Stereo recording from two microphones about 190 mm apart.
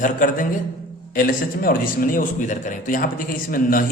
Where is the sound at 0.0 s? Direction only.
45° left (ahead or behind).